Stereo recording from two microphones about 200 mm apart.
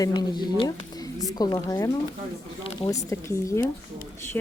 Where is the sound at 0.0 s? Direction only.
20° left (ahead or behind).